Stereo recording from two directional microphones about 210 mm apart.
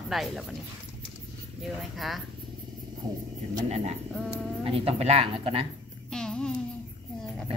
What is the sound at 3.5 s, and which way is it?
Speech, 30° right (ahead or behind).